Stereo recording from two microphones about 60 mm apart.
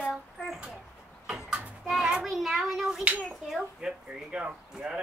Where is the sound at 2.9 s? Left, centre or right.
Right.